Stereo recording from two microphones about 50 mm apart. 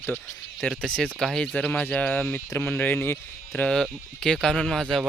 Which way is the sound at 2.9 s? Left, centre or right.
Left.